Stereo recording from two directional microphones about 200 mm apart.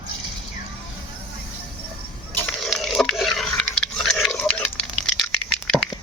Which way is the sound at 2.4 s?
Centre (ahead or behind).